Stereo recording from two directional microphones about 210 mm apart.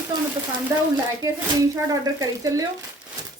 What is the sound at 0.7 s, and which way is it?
Speech, 15° right (ahead or behind).